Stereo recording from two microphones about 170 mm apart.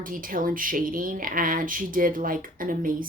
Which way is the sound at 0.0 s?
55° right (ahead or behind).